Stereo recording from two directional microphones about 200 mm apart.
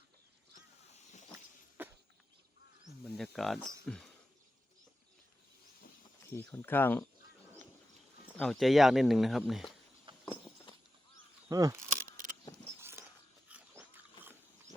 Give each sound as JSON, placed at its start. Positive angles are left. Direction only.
{"t": 1.8, "sound": "a sound", "side_deg": -10}
{"t": 3.2, "sound": "speech", "side_deg": 0}
{"t": 6.3, "sound": "speech", "side_deg": 10}
{"t": 8.3, "sound": "speech", "side_deg": 5}
{"t": 10.1, "sound": "clip-clop", "side_deg": -25}
{"t": 11.4, "sound": "speech", "side_deg": -15}
{"t": 12.8, "sound": "a sound", "side_deg": -10}
{"t": 13.5, "sound": "dog", "side_deg": -10}